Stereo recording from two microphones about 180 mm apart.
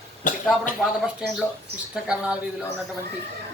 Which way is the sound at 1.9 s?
5° right (ahead or behind).